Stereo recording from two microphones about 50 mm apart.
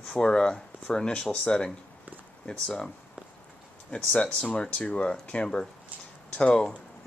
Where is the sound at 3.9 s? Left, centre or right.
Left.